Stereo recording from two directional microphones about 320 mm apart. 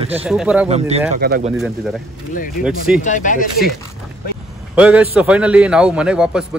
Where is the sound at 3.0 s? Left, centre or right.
Left.